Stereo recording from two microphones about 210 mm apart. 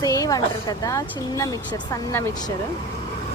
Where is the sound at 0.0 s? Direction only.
15° left (ahead or behind).